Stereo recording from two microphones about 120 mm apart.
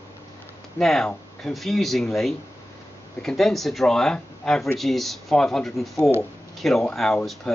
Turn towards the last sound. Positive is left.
turn(degrees=5)  # may be behind; listen again after turning